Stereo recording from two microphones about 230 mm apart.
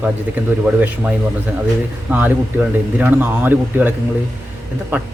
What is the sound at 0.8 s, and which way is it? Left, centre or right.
Speech, centre.